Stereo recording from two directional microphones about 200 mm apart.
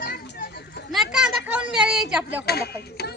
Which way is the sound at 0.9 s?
Centre (ahead or behind).